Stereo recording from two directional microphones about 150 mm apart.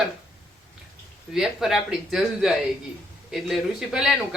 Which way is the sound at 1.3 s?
Centre (ahead or behind).